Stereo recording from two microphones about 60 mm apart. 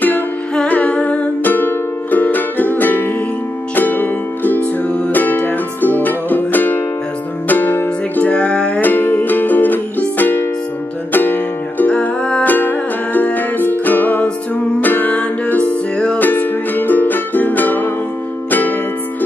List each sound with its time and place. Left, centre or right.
0.7 s music: left
8.3 s music: centre
8.8 s music: left